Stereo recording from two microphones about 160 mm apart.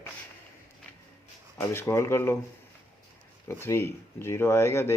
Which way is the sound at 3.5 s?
15° left (ahead or behind).